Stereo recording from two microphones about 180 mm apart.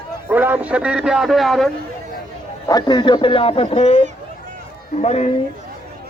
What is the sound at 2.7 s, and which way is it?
A man's voice, 25° left (ahead or behind).